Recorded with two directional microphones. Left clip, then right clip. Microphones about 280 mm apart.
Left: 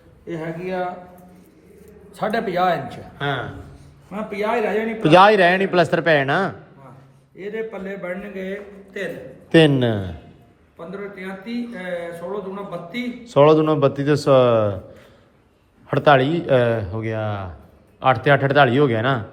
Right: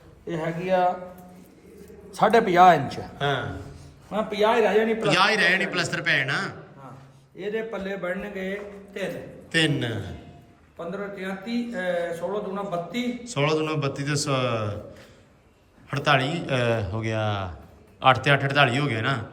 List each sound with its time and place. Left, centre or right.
0.3 s a man's voice: centre
2.1 s a man's voice: right
3.2 s a man's voice: centre
5.0 s a man's voice: centre
7.4 s a man's voice: centre
9.5 s a man's voice: centre
10.8 s a man's voice: centre
13.2 s a man's voice: centre
15.9 s a man's voice: centre